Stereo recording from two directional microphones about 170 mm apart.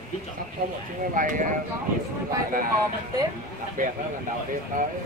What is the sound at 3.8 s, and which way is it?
Speech, 50° right (ahead or behind).